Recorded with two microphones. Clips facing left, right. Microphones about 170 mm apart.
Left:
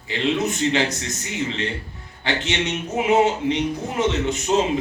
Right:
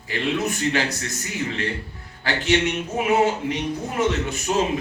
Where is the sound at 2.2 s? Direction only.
20° left (ahead or behind).